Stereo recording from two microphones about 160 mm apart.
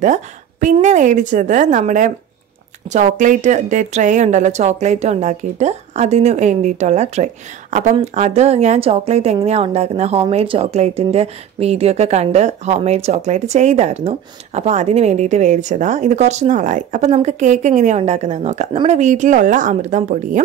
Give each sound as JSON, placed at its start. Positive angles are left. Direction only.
{"t": 0.0, "sound": "a woman's voice", "side_deg": -50}